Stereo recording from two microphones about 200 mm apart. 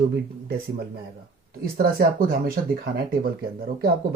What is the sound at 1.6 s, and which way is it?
Speech, 45° right (ahead or behind).